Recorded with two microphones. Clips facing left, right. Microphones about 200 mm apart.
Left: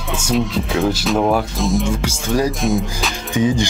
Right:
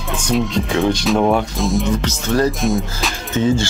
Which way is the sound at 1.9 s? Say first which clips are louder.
Right 1 dB; 10° left (ahead or behind).